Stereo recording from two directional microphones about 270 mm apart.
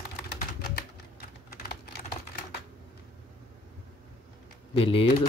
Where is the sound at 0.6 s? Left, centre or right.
Left.